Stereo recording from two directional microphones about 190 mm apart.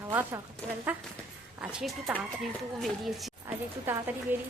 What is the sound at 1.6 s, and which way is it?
A woman's voice, 5° right (ahead or behind).